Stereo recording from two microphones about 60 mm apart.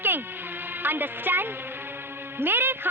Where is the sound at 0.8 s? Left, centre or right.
Right.